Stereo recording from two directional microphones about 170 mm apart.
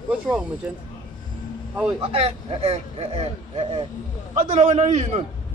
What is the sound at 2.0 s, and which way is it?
Speech, 35° right (ahead or behind).